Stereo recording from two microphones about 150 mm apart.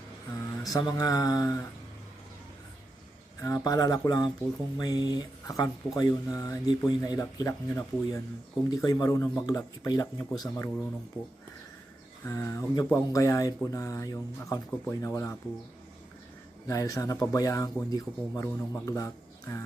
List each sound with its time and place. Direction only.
0.6 s speech: 25° left (ahead or behind)
3.4 s speech: 25° left (ahead or behind)
12.2 s speech: 15° left (ahead or behind)
16.6 s speech: 20° left (ahead or behind)